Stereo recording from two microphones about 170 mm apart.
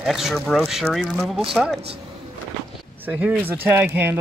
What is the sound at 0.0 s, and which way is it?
Speech, centre (ahead or behind).